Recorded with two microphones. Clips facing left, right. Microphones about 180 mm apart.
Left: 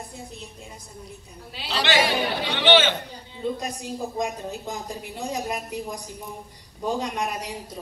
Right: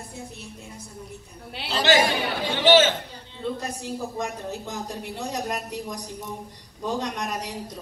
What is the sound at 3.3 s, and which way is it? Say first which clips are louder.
A woman's voice: left 1 dB; 15° left (ahead or behind).